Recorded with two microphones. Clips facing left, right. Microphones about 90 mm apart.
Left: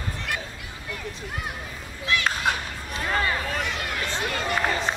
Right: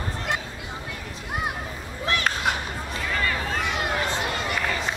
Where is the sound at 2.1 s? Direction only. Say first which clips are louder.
Even; 40° right (ahead or behind).